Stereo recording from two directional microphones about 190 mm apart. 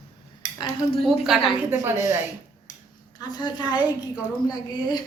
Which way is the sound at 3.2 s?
20° left (ahead or behind).